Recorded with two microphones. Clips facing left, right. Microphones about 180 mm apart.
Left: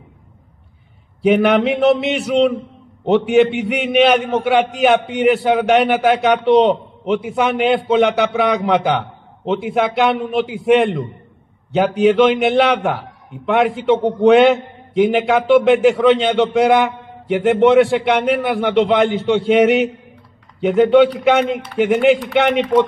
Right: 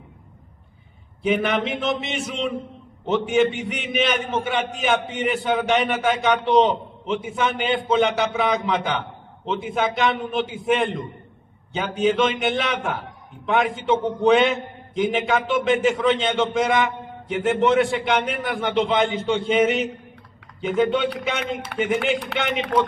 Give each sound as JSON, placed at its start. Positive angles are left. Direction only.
{"t": 1.2, "sound": "a man's voice", "side_deg": 65}